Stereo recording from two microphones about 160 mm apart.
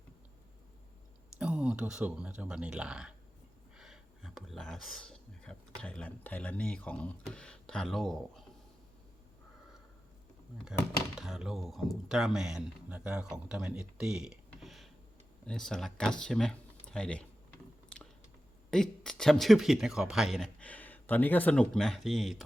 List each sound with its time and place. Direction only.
1.4 s speech: 5° right (ahead or behind)
11.1 s speech: centre (ahead or behind)
18.7 s speech: 5° left (ahead or behind)